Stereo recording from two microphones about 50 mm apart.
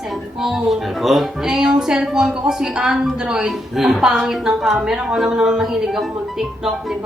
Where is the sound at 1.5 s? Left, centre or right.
Centre.